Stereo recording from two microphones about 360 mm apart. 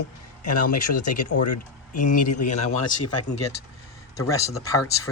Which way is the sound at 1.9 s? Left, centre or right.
Left.